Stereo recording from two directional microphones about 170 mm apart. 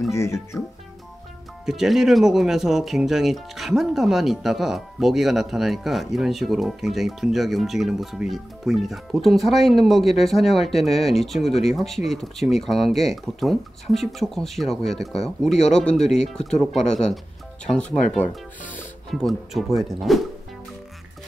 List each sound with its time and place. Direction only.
0.1 s speech: 15° left (ahead or behind)
1.7 s speech: centre (ahead or behind)